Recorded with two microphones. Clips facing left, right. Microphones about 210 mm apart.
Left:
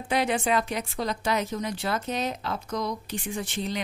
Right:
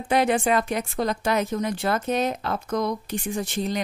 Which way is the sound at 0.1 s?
50° right (ahead or behind).